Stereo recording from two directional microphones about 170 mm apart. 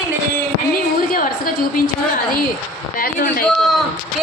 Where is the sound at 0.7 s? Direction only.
55° left (ahead or behind).